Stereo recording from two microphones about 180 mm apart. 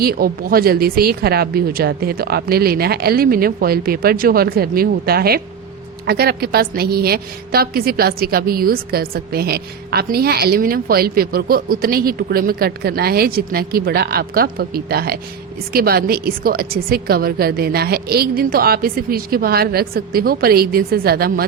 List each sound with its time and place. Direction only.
0.0 s a woman's voice: 55° right (ahead or behind)